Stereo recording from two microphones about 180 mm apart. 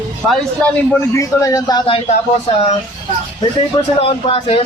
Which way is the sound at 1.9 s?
30° left (ahead or behind).